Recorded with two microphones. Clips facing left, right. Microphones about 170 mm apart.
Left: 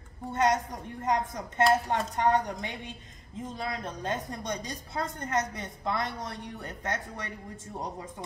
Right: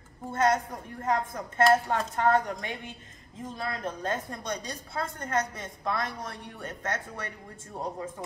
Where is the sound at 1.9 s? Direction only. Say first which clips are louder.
Right 1 dB; 15° left (ahead or behind).